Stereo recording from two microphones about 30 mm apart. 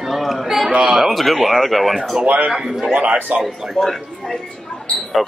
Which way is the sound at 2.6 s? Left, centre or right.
Centre.